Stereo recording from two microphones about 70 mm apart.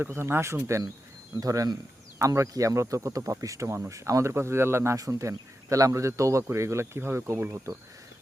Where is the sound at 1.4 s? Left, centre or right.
Right.